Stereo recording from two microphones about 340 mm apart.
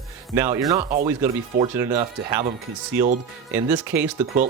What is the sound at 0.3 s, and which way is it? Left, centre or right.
Speech, centre.